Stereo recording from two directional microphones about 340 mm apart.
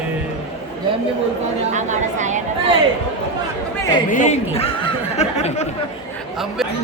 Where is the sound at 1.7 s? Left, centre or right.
Right.